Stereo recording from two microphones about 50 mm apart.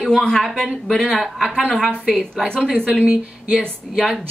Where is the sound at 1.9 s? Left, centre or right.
Centre.